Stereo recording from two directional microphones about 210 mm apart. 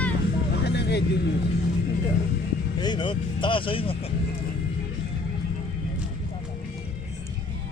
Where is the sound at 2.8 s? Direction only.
20° left (ahead or behind).